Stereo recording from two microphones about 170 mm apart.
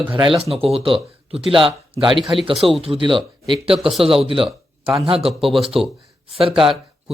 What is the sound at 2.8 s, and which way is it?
Speech, 30° right (ahead or behind).